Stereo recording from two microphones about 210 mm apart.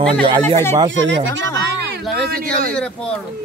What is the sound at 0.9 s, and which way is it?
Speech, 60° right (ahead or behind).